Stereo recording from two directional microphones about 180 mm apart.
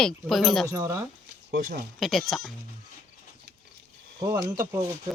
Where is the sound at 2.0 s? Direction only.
Centre (ahead or behind).